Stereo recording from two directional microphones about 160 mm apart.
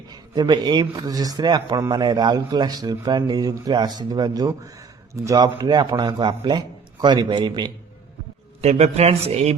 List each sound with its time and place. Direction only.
0.1 s speech: 25° right (ahead or behind)
8.6 s speech: 40° right (ahead or behind)